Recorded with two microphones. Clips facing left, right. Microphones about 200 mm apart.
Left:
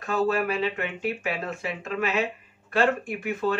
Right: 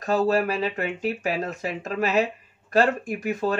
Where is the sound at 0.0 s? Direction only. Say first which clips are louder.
Right 3 dB; 35° right (ahead or behind).